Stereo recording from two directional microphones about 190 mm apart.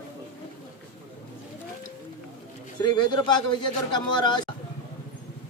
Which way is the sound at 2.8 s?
25° left (ahead or behind).